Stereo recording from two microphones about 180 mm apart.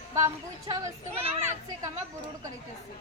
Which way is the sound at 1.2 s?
35° right (ahead or behind).